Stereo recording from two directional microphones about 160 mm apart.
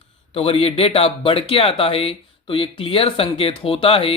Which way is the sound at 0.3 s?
35° left (ahead or behind).